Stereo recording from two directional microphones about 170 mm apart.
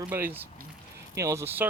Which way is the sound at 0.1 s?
10° right (ahead or behind).